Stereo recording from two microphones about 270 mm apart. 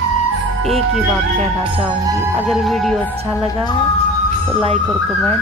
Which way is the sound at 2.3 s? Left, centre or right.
Centre.